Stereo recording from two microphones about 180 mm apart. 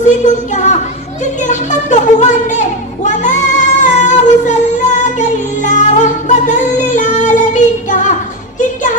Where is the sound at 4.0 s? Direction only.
40° left (ahead or behind).